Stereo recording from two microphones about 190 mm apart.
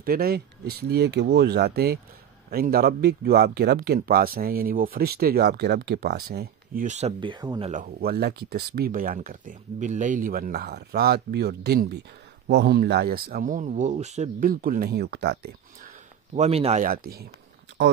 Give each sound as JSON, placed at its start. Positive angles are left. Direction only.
{"t": 0.0, "sound": "speech", "side_deg": -50}
{"t": 7.7, "sound": "speech", "side_deg": -50}
{"t": 16.3, "sound": "speech", "side_deg": -30}